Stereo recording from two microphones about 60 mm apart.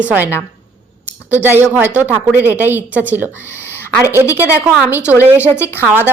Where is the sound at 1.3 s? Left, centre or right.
Right.